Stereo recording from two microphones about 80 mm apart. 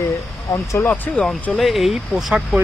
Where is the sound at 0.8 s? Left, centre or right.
Centre.